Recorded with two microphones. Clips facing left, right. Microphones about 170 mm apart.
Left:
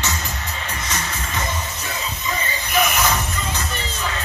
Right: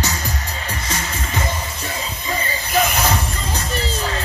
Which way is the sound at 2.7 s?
35° right (ahead or behind).